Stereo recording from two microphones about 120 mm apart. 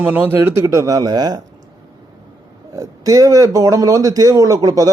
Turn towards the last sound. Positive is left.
turn(degrees=-30)  # may be behind; listen again after turning